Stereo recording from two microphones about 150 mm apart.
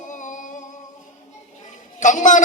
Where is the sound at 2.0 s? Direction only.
55° left (ahead or behind).